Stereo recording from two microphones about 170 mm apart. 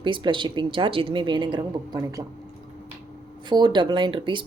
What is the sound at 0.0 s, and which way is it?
Speech, 30° right (ahead or behind).